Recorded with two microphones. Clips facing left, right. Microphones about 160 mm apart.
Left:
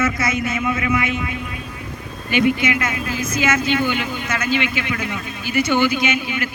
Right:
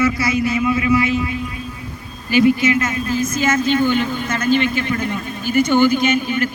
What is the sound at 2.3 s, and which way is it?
Speech, 20° left (ahead or behind).